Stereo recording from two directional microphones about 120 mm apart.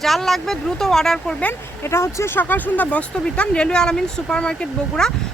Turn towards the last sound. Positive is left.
turn(degrees=5)  # may be behind; listen again after turning